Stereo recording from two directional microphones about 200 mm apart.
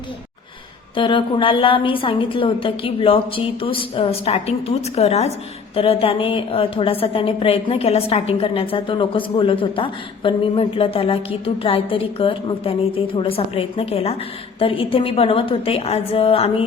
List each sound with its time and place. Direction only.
0.9 s a woman's voice: 25° left (ahead or behind)